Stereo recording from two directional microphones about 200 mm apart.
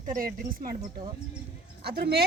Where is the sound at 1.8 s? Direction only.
50° right (ahead or behind).